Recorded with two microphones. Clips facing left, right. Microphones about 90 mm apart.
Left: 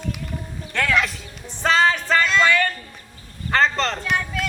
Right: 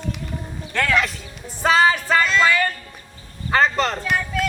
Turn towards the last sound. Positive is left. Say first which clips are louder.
# right 2 dB
turn(degrees=0)  # may be behind; listen again after turning